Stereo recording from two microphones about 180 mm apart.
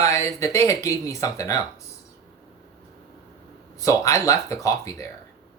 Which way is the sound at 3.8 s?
20° left (ahead or behind).